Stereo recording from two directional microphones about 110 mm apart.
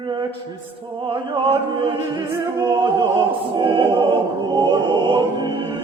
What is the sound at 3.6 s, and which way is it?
Opera, 50° right (ahead or behind).